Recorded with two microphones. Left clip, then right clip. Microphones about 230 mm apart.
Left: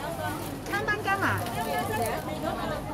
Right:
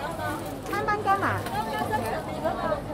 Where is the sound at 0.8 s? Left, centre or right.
Left.